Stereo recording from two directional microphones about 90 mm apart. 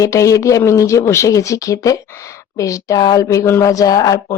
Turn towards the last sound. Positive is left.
turn(degrees=45)  # may be behind; listen again after turning